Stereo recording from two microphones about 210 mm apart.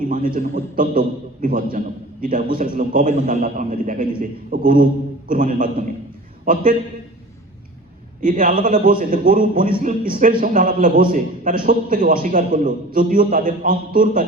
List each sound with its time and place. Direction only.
0.0 s a man's voice: 40° right (ahead or behind)
8.2 s a man's voice: 40° right (ahead or behind)